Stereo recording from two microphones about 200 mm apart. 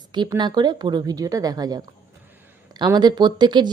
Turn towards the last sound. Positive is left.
turn(degrees=-20)  # may be behind; listen again after turning